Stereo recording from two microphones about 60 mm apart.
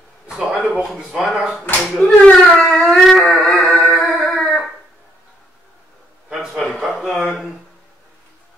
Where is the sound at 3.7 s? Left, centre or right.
Centre.